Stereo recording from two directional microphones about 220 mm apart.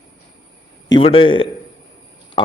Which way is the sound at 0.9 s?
25° left (ahead or behind).